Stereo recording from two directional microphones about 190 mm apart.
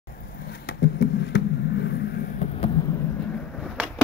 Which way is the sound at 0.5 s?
55° left (ahead or behind).